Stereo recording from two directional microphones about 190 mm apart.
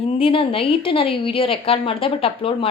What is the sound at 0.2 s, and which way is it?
A woman's voice, 30° left (ahead or behind).